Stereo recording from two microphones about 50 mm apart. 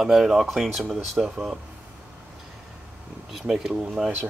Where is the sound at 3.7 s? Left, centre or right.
Right.